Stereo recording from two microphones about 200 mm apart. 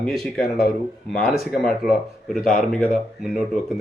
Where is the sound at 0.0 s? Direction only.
Centre (ahead or behind).